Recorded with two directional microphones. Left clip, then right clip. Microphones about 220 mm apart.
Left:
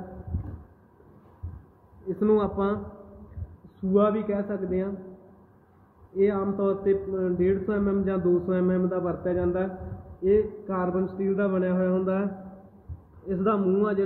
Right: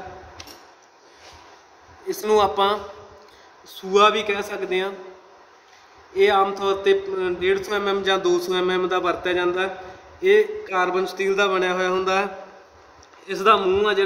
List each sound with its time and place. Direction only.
2.2 s a man's voice: 35° right (ahead or behind)
3.9 s a man's voice: 40° right (ahead or behind)
6.1 s a man's voice: 40° right (ahead or behind)
13.3 s a man's voice: 35° right (ahead or behind)